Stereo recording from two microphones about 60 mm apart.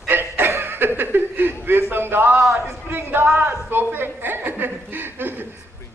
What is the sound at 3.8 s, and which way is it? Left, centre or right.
Chuckle, right.